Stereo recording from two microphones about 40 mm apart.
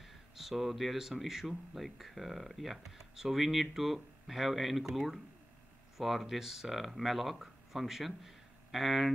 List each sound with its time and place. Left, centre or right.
0.0 s speech: centre